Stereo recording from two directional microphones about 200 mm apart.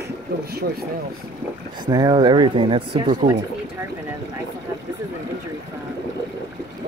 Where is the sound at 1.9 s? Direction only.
20° right (ahead or behind).